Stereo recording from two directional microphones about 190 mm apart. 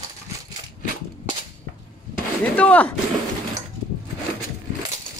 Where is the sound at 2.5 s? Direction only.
10° left (ahead or behind).